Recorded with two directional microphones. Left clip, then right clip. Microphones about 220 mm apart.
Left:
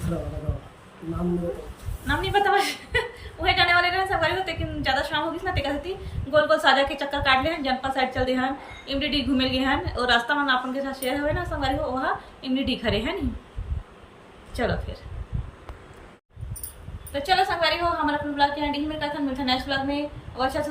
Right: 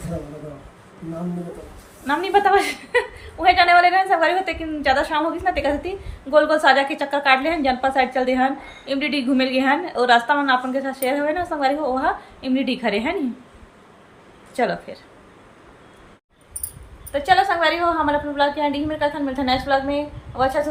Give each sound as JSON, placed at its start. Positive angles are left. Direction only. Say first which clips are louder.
{"t": 2.0, "sound": "a woman's voice", "louder": "right 5 dB", "side_deg": -15}
{"t": 14.5, "sound": "speech", "louder": "right 5 dB", "side_deg": -10}
{"t": 17.1, "sound": "a woman's voice", "louder": "right 5 dB", "side_deg": -15}